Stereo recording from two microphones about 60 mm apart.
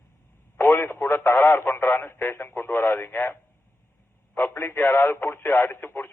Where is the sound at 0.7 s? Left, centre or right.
Left.